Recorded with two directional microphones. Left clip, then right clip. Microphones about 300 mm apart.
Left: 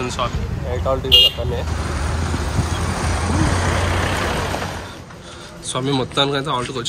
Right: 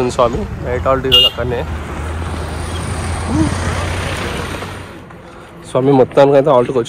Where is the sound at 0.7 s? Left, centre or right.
Left.